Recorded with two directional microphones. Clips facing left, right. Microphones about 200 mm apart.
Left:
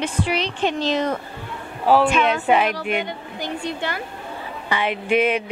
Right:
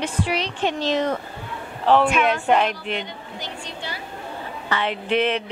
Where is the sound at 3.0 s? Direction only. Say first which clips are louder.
Left 5 dB; 55° left (ahead or behind).